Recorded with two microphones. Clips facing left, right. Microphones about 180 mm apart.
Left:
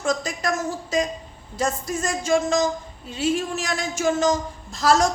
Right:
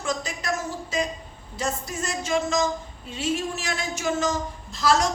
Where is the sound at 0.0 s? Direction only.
40° left (ahead or behind).